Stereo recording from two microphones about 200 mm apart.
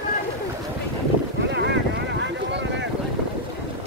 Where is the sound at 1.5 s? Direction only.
60° right (ahead or behind).